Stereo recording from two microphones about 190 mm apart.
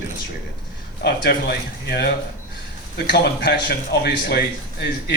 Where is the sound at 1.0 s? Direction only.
55° left (ahead or behind).